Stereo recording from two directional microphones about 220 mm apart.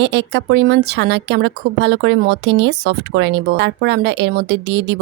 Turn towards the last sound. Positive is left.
turn(degrees=-50)  # may be behind; listen again after turning